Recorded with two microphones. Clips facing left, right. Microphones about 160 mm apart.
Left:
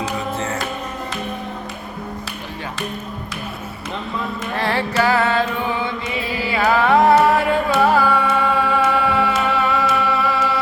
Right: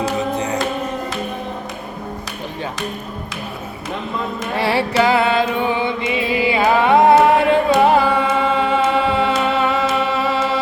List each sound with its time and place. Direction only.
0.2 s music: 15° right (ahead or behind)
4.5 s music: 10° right (ahead or behind)